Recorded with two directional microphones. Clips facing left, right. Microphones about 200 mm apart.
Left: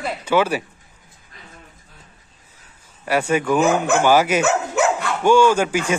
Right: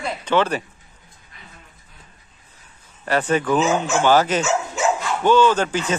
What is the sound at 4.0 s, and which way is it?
Speech, 10° left (ahead or behind).